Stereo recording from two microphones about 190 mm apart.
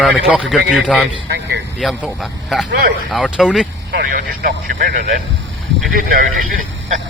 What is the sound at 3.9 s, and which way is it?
Speech, 50° right (ahead or behind).